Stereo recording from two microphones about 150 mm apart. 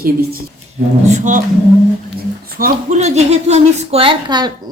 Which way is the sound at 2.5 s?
70° right (ahead or behind).